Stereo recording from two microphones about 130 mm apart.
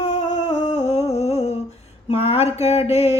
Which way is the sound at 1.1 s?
55° left (ahead or behind).